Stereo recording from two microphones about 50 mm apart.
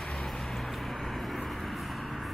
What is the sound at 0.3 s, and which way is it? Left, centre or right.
Vehicle, centre.